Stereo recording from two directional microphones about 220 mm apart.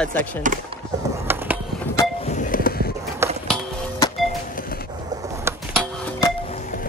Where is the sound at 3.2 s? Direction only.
10° right (ahead or behind).